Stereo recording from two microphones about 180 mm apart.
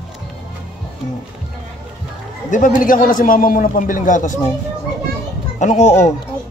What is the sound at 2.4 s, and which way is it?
A man's voice, 45° left (ahead or behind).